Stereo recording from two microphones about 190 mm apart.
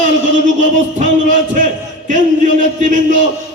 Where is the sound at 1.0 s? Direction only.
40° right (ahead or behind).